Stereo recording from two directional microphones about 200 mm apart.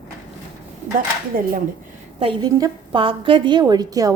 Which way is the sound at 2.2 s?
20° right (ahead or behind).